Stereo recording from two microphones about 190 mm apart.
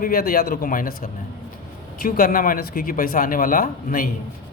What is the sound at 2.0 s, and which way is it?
Speech, 50° left (ahead or behind).